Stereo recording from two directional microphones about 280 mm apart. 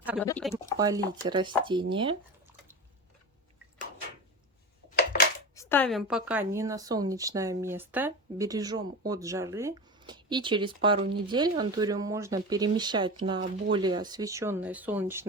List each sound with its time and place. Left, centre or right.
0.2 s speech: centre
0.8 s a woman's voice: centre
5.1 s dishes: left
5.5 s a woman's voice: centre